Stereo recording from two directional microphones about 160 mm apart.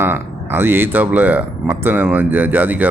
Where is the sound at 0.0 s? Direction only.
15° right (ahead or behind).